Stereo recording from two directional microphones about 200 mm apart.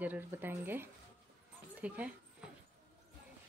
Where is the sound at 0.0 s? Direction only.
10° right (ahead or behind).